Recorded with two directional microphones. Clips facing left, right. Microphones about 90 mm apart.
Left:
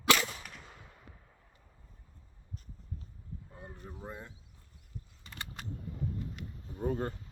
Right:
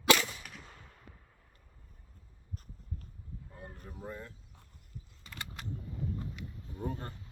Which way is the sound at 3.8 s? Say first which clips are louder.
Right 1 dB; 20° left (ahead or behind).